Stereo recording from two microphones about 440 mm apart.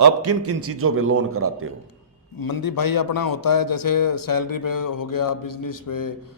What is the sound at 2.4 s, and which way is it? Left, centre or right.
A man's voice, left.